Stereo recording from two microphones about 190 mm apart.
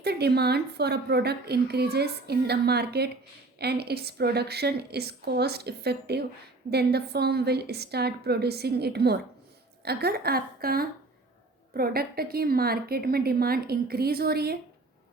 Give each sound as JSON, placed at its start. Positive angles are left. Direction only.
{"t": 0.0, "sound": "a woman's voice", "side_deg": -60}